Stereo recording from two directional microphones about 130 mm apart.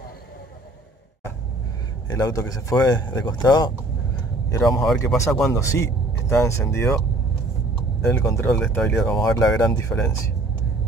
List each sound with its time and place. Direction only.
2.0 s speech: 30° left (ahead or behind)
8.1 s speech: 20° left (ahead or behind)
8.5 s speech: 5° left (ahead or behind)
8.8 s speech: 15° left (ahead or behind)